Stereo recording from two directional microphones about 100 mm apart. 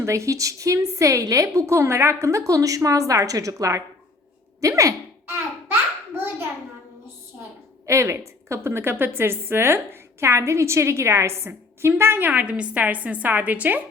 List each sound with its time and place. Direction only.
0.0 s a woman's voice: 30° right (ahead or behind)
7.9 s a woman's voice: 30° right (ahead or behind)